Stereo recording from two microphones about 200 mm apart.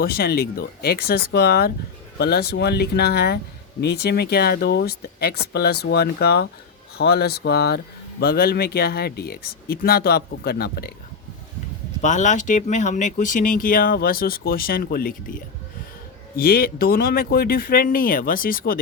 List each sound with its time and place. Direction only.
0.0 s speech: 50° left (ahead or behind)
12.0 s speech: 40° left (ahead or behind)
16.4 s speech: 50° left (ahead or behind)